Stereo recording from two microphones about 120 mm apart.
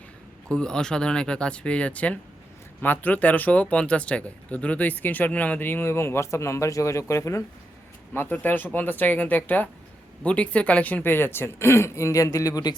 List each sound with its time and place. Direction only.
0.4 s speech: 5° left (ahead or behind); by 12.7 s 30° left (ahead or behind)